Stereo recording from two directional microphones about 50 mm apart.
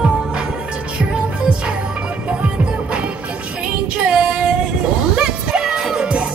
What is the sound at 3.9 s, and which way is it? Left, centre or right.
Female singing, centre.